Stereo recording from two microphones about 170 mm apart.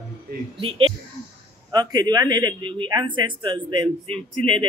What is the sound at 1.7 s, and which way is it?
Speech, 25° right (ahead or behind).